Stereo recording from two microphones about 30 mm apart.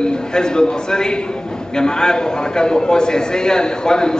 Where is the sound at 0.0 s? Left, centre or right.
Left.